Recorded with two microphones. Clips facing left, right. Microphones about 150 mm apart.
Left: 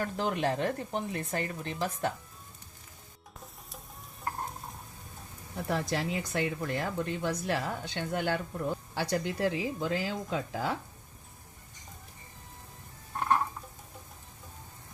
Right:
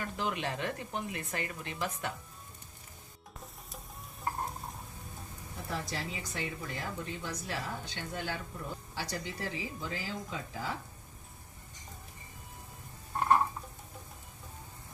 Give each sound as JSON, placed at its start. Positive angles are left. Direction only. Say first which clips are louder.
{"t": 0.0, "sound": "speech", "louder": "left 5 dB", "side_deg": 40}
{"t": 4.2, "sound": "stir", "louder": "even", "side_deg": 0}
{"t": 5.6, "sound": "speech", "louder": "left 7 dB", "side_deg": 65}